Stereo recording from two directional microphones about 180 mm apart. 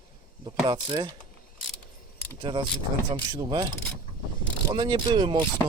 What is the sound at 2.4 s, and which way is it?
Mechanisms, 25° right (ahead or behind).